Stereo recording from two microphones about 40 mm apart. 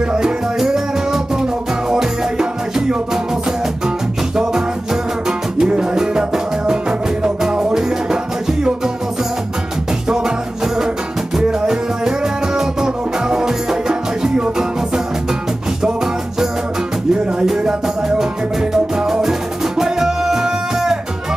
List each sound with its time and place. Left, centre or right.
0.1 s music: centre
5.7 s music: centre
10.0 s music: centre
15.8 s music: centre
18.6 s music: centre